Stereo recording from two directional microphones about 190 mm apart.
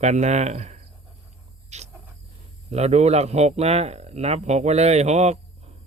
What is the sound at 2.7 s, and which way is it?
Speech, 35° right (ahead or behind).